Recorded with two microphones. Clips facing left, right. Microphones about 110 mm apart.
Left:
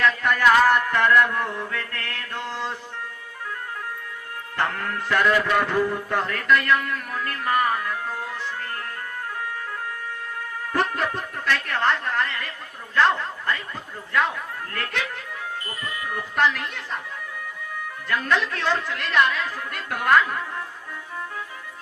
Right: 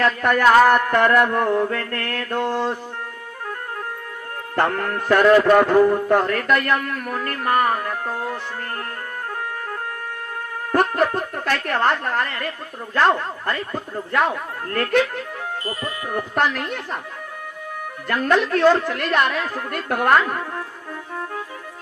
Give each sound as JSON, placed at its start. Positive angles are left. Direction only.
{"t": 0.0, "sound": "a man's voice", "side_deg": -50}
{"t": 4.5, "sound": "a man's voice", "side_deg": -50}
{"t": 10.7, "sound": "a man's voice", "side_deg": -50}
{"t": 15.6, "sound": "a man's voice", "side_deg": -40}
{"t": 18.1, "sound": "a man's voice", "side_deg": -45}